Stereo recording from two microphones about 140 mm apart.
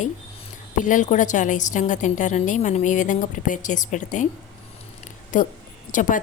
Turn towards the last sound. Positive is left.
turn(degrees=65)  # may be behind; listen again after turning